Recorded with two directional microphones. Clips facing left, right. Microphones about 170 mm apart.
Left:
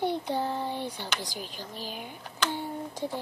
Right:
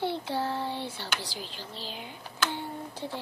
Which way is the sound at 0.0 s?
15° left (ahead or behind).